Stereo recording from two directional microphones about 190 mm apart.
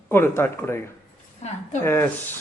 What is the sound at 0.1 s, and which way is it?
Speech, 10° left (ahead or behind).